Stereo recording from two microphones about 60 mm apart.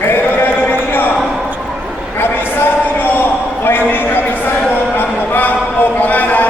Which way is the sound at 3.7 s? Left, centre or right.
Left.